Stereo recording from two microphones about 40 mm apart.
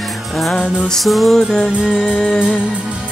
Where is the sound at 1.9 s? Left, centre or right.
Centre.